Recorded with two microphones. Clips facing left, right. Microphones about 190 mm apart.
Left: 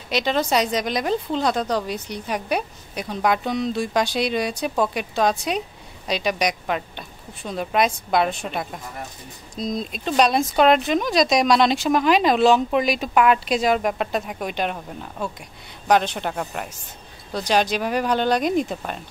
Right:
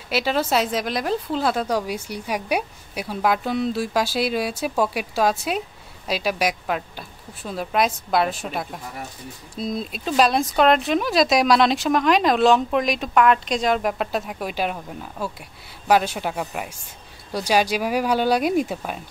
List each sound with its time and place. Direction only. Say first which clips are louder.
0.1 s speech: even; 5° right (ahead or behind)